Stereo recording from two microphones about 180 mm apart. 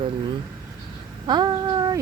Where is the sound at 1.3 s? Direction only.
25° right (ahead or behind).